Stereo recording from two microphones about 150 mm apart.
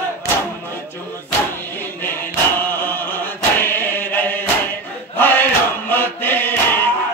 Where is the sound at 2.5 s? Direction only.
15° left (ahead or behind).